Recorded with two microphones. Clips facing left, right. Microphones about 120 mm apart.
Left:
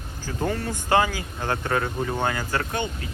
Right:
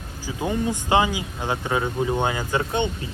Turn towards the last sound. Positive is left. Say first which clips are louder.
# right 4 dB
turn(degrees=-25)  # may be behind; listen again after turning